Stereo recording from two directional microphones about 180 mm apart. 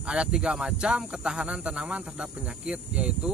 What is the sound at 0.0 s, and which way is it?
Speech, 5° right (ahead or behind).